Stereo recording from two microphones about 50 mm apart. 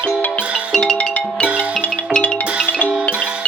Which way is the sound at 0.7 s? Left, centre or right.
Centre.